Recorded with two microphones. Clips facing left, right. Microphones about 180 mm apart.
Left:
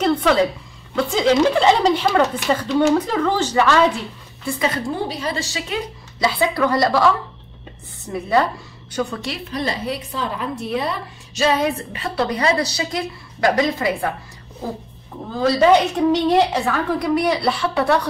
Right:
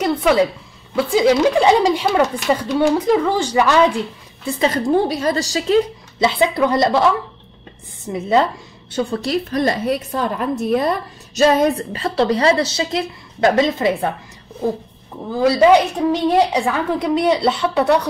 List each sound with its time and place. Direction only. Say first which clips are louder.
0.0 s a woman's voice: right 1 dB; 10° right (ahead or behind)
4.8 s a woman's voice: right 7 dB; 45° right (ahead or behind)
6.1 s a woman's voice: right 3 dB; 25° right (ahead or behind)
8.1 s a woman's voice: right 2 dB; 20° right (ahead or behind)
8.9 s a woman's voice: right 5 dB; 35° right (ahead or behind)
15.4 s a woman's voice: right 2 dB; 10° right (ahead or behind)